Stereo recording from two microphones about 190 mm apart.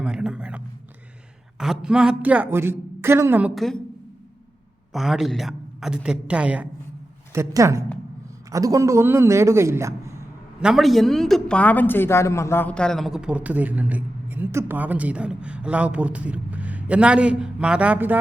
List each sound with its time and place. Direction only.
0.0 s a sound: 5° right (ahead or behind)
1.5 s a woman's voice: centre (ahead or behind)
4.9 s a woman's voice: centre (ahead or behind)
10.6 s speech: centre (ahead or behind)